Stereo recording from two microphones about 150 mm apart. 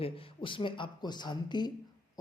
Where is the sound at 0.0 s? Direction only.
35° left (ahead or behind).